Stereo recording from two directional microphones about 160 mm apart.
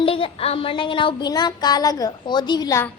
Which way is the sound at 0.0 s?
35° left (ahead or behind).